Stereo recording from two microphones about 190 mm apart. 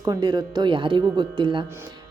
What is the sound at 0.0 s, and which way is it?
A woman's voice, 20° right (ahead or behind).